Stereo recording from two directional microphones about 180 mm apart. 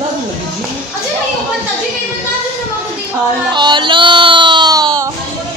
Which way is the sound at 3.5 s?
25° right (ahead or behind).